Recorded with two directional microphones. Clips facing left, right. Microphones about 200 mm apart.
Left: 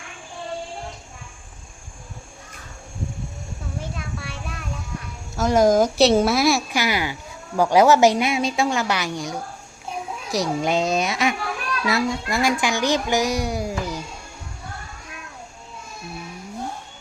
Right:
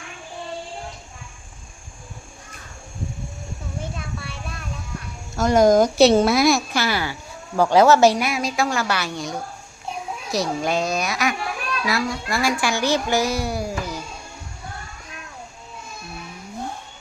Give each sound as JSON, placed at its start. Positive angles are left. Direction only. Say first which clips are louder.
{"t": 5.4, "sound": "speech", "louder": "right 1 dB", "side_deg": 0}